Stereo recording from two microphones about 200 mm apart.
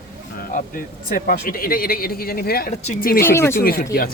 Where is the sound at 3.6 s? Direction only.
50° left (ahead or behind).